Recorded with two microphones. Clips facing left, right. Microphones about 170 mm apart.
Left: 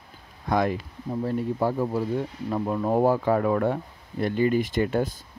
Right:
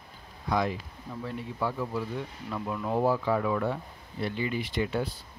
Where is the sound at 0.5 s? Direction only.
50° left (ahead or behind).